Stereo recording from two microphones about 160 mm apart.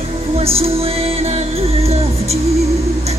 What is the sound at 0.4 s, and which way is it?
Music, 40° right (ahead or behind).